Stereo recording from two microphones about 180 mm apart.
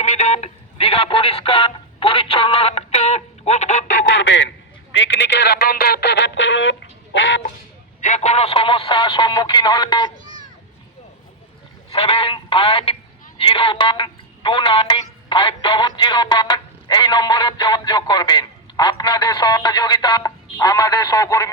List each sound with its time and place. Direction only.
0.0 s speech: 40° left (ahead or behind)
4.3 s a man's voice: 85° left
8.0 s music: 40° left (ahead or behind)
11.9 s speech: 30° left (ahead or behind)
15.3 s music: 30° left (ahead or behind)